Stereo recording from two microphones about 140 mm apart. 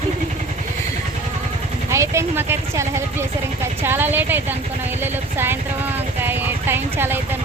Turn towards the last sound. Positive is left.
turn(degrees=-15)  # may be behind; listen again after turning